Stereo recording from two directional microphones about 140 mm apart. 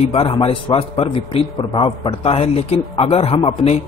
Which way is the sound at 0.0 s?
40° left (ahead or behind).